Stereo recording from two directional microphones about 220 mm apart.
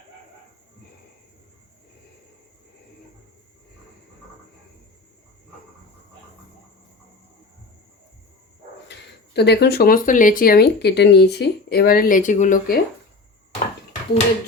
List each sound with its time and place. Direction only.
8.9 s speech: 50° left (ahead or behind)